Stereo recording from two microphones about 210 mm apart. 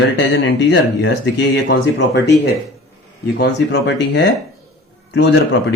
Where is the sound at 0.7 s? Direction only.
55° left (ahead or behind).